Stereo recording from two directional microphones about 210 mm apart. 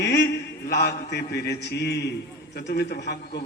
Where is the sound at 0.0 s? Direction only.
55° left (ahead or behind).